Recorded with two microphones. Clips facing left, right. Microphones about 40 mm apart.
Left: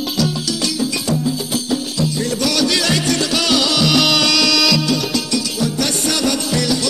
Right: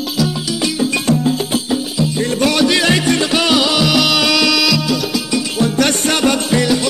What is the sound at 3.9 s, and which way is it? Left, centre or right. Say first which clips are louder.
Music: right 1 dB; centre.